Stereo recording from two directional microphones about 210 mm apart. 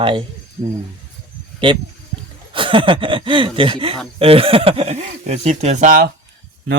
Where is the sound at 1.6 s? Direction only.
25° right (ahead or behind).